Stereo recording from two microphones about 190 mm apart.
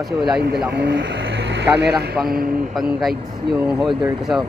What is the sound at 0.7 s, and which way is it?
Speech, 60° right (ahead or behind).